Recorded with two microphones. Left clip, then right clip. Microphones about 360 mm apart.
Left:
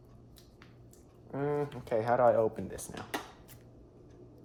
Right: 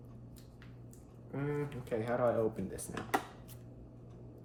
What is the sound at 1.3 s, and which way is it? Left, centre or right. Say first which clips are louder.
Speech: left 5 dB; centre.